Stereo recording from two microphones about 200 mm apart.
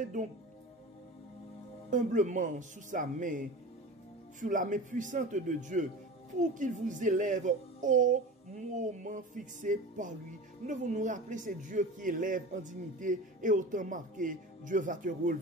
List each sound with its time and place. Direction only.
0.2 s a man's voice: 40° right (ahead or behind)
1.9 s a man's voice: 40° right (ahead or behind)